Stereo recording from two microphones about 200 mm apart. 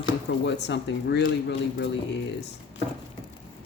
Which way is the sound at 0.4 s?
60° left (ahead or behind).